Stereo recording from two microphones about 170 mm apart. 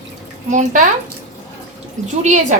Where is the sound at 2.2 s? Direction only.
45° right (ahead or behind).